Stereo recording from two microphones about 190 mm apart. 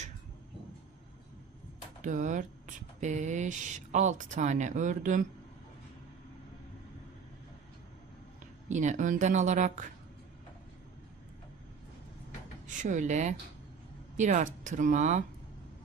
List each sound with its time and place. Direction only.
2.0 s speech: 40° right (ahead or behind)
8.6 s speech: 40° right (ahead or behind)
12.6 s speech: 40° right (ahead or behind)